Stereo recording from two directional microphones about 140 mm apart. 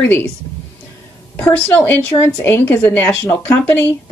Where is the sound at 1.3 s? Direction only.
15° left (ahead or behind).